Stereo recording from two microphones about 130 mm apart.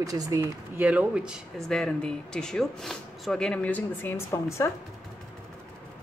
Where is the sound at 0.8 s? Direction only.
10° right (ahead or behind).